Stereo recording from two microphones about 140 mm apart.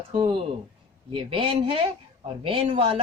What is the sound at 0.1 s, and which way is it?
Speech, 35° right (ahead or behind).